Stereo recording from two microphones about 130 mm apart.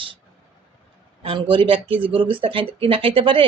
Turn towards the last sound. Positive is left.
turn(degrees=-40)  # may be behind; listen again after turning